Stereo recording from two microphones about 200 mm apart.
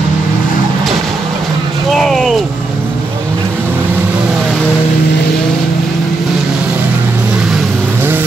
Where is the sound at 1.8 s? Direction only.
Centre (ahead or behind).